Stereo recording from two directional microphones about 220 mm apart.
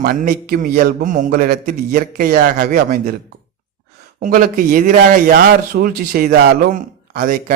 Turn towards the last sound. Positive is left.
turn(degrees=-40)  # may be behind; listen again after turning